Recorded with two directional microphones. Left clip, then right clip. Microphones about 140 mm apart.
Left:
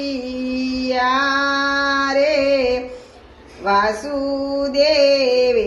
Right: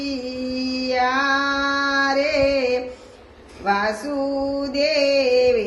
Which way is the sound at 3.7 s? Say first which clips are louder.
Left 4 dB; 25° left (ahead or behind).